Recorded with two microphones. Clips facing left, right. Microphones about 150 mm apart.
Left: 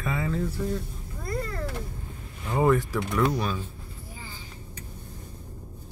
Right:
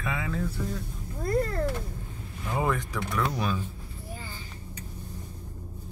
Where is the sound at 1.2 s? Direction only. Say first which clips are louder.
Right 6 dB; 45° right (ahead or behind).